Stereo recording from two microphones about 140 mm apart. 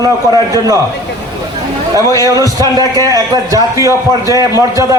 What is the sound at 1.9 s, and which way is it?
A man's voice, 25° right (ahead or behind).